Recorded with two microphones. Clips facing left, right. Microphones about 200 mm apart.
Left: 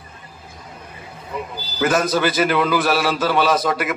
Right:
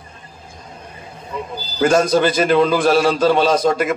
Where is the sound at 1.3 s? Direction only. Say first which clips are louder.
Right 1 dB; 25° right (ahead or behind).